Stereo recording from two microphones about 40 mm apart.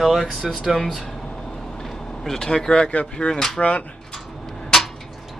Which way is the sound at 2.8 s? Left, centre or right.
Left.